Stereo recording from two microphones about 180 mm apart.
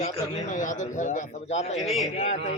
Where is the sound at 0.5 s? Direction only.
45° left (ahead or behind).